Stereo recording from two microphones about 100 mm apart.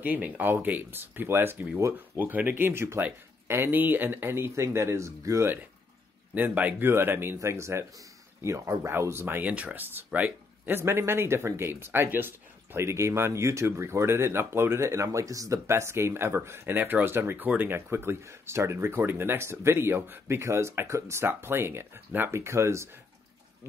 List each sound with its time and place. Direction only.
0.0 s speech: 15° right (ahead or behind)